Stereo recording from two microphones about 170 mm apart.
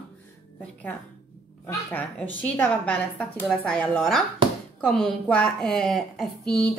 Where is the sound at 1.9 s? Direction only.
10° left (ahead or behind).